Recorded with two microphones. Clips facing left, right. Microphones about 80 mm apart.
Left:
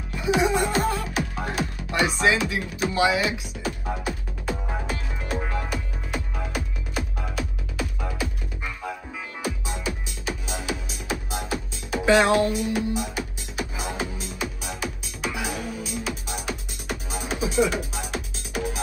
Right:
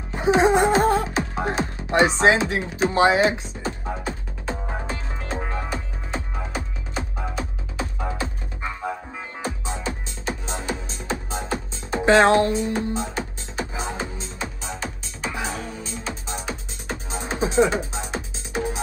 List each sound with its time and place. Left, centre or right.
0.1 s music: right
11.3 s music: right
14.7 s music: centre
16.4 s music: right